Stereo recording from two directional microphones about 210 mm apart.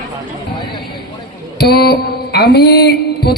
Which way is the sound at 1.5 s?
50° left (ahead or behind).